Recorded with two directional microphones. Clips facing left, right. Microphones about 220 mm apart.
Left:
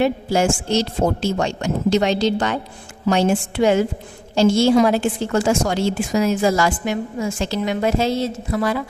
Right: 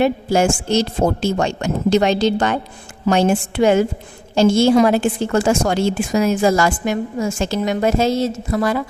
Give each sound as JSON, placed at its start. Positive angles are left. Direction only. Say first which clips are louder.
{"t": 0.0, "sound": "a woman's voice", "louder": "right 2 dB", "side_deg": -50}